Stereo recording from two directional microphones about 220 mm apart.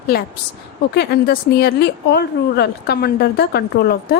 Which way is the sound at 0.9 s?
45° left (ahead or behind).